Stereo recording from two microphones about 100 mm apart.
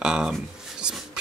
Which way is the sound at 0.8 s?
10° right (ahead or behind).